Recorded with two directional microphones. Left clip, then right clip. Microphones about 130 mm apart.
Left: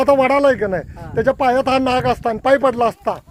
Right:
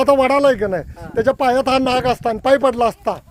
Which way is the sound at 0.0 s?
10° right (ahead or behind).